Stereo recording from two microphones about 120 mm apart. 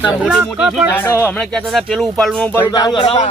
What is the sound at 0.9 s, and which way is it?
Speech, 20° left (ahead or behind).